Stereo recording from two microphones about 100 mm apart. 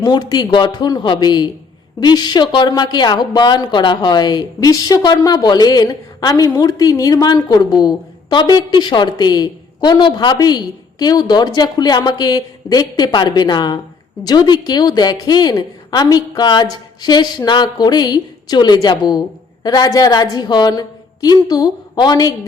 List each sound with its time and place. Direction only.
0.0 s a woman's voice: 45° left (ahead or behind)